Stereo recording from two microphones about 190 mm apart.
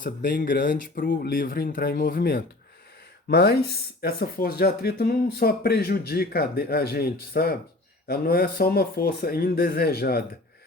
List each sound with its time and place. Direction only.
0.0 s speech: 45° left (ahead or behind)